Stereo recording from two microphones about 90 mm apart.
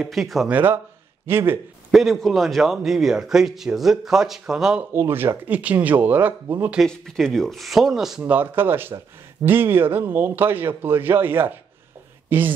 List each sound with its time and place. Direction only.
0.0 s a man's voice: centre (ahead or behind)
0.5 s a man's voice: 20° right (ahead or behind)
1.9 s a man's voice: centre (ahead or behind)
4.9 s a man's voice: 25° right (ahead or behind)
6.9 s a man's voice: 5° left (ahead or behind)
8.2 s a man's voice: 20° right (ahead or behind)